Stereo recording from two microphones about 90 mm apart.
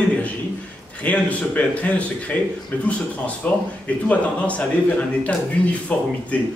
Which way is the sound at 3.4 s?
15° left (ahead or behind).